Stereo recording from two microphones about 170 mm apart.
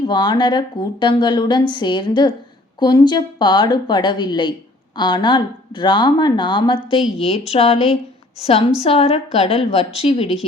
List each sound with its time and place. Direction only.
0.0 s a woman's voice: 25° left (ahead or behind)